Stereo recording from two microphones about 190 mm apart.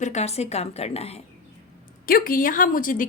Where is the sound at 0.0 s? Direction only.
35° left (ahead or behind).